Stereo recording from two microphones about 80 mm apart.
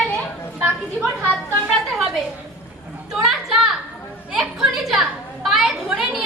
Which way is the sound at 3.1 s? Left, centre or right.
Centre.